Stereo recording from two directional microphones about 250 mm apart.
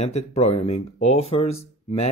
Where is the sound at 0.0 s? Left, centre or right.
Left.